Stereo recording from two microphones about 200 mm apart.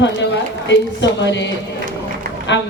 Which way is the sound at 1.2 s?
60° left (ahead or behind).